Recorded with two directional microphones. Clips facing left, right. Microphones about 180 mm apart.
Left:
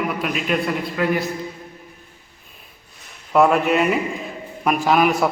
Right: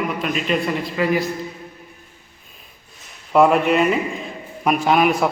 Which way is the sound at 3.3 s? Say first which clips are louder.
Right 1 dB; centre (ahead or behind).